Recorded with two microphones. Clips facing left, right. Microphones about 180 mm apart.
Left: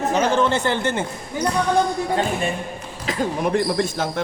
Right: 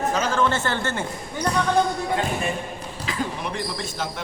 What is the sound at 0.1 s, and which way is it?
Speech, 20° left (ahead or behind).